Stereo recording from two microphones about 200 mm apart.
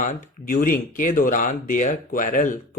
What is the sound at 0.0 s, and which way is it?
Speech, 40° left (ahead or behind).